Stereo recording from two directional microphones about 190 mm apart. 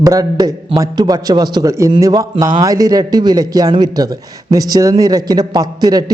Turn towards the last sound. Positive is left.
turn(degrees=-20)  # may be behind; listen again after turning